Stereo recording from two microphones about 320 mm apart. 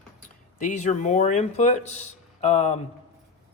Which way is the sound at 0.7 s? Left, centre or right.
Left.